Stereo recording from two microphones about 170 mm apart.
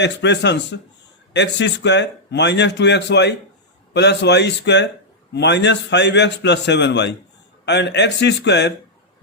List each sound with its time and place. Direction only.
0.0 s a man's voice: 90° left